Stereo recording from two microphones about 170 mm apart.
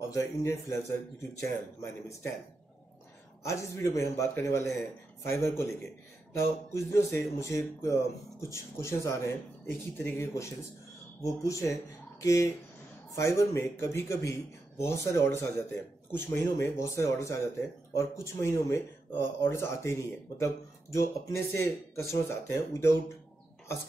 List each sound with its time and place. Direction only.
0.1 s speech: 15° left (ahead or behind)
3.4 s speech: 15° left (ahead or behind)